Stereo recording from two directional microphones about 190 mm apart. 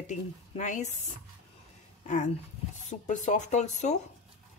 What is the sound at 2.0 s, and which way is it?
Speech, 40° left (ahead or behind).